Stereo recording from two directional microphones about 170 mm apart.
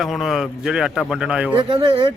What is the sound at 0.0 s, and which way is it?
A man's voice, centre (ahead or behind).